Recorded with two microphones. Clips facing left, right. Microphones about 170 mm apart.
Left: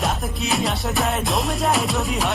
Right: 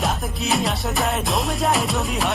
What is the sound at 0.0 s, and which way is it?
Music, centre (ahead or behind).